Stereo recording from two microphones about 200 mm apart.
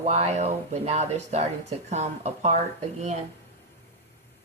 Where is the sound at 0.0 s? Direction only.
35° right (ahead or behind).